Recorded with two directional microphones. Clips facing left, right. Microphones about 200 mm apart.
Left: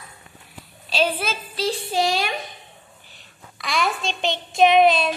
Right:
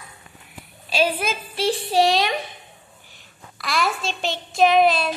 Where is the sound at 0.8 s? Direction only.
10° right (ahead or behind).